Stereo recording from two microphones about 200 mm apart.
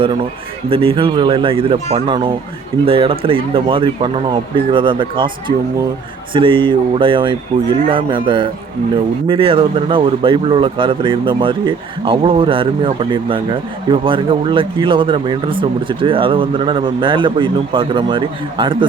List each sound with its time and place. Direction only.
0.7 s speech: 25° right (ahead or behind)